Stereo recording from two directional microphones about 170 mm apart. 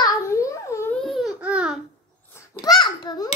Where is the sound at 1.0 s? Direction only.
Centre (ahead or behind).